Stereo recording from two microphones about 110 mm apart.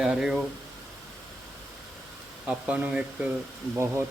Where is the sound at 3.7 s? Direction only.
25° right (ahead or behind).